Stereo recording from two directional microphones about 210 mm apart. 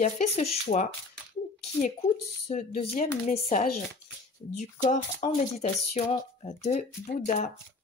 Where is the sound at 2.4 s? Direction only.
30° left (ahead or behind).